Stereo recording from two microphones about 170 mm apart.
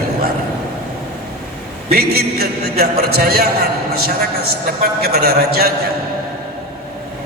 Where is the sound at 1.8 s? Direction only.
65° right (ahead or behind).